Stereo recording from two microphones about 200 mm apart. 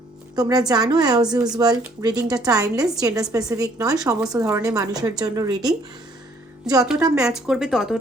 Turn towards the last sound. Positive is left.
turn(degrees=0)  # may be behind; listen again after turning